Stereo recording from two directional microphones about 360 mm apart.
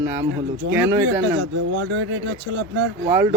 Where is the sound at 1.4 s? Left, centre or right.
Right.